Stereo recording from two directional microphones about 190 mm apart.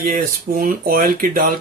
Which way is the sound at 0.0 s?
45° right (ahead or behind).